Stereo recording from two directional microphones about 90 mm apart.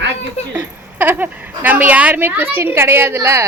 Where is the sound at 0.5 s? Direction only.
20° right (ahead or behind).